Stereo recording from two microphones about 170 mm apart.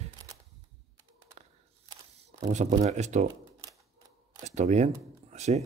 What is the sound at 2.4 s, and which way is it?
Speech, 45° right (ahead or behind).